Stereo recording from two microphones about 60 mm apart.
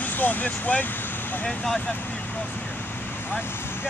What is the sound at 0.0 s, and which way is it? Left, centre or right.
Speech, left.